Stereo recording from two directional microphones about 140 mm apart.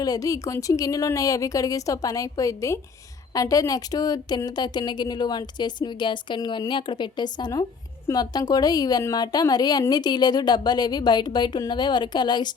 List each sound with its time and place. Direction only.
0.0 s a woman's voice: 25° left (ahead or behind)